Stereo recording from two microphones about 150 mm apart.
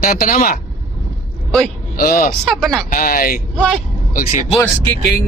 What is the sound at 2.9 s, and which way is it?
Speech, 70° left (ahead or behind).